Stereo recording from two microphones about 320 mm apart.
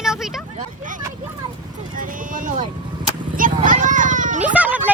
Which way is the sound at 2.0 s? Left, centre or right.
Right.